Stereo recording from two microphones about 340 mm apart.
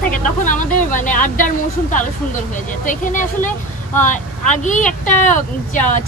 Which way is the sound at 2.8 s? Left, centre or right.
Left.